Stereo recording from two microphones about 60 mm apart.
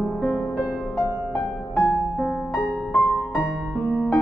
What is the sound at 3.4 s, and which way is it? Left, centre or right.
Music, centre.